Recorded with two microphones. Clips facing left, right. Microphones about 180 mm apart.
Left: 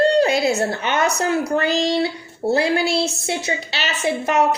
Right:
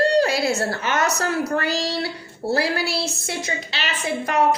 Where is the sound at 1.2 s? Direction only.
20° left (ahead or behind).